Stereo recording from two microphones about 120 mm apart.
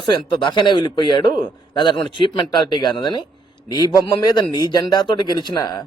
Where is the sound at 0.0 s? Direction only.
40° left (ahead or behind).